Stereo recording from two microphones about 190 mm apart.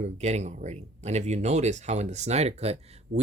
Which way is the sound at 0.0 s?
35° right (ahead or behind).